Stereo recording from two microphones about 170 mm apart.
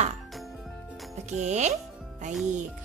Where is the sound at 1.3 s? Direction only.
40° right (ahead or behind).